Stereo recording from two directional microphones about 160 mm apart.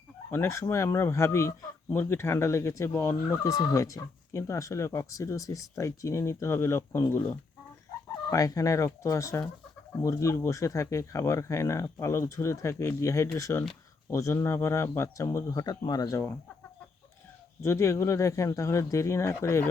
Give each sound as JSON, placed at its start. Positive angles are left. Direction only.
{"t": 0.3, "sound": "speech", "side_deg": 15}
{"t": 17.6, "sound": "speech", "side_deg": 15}